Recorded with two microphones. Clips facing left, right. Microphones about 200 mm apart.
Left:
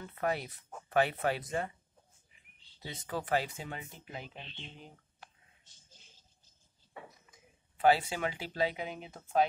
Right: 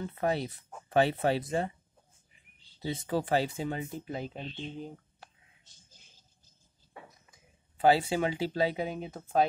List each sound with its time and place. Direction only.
0.0 s speech: 30° right (ahead or behind)
2.8 s speech: 30° right (ahead or behind)
7.7 s speech: 30° right (ahead or behind)